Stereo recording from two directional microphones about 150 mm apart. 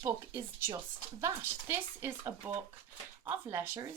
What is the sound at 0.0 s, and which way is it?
Speech, 15° right (ahead or behind).